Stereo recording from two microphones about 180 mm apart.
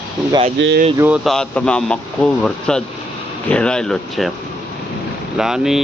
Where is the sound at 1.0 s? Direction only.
5° right (ahead or behind).